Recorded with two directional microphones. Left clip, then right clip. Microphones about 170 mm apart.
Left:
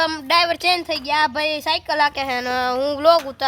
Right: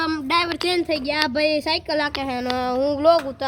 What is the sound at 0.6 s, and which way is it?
A woman's voice, 40° left (ahead or behind).